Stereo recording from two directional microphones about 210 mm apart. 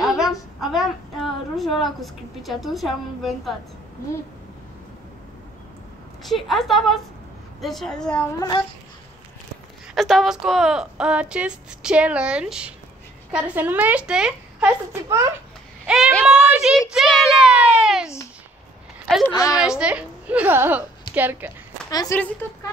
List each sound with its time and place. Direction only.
0.0 s a sound: centre (ahead or behind)
6.2 s speech: centre (ahead or behind)
9.9 s speech: centre (ahead or behind)
15.8 s speech: centre (ahead or behind)
16.9 s a sound: centre (ahead or behind)
19.0 s speech: centre (ahead or behind)
19.3 s speech: 15° left (ahead or behind)
19.6 s speech: 5° right (ahead or behind)
21.9 s speech: 15° left (ahead or behind)